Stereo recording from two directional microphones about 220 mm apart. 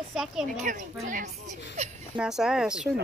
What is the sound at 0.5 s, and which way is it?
Speech, 35° right (ahead or behind).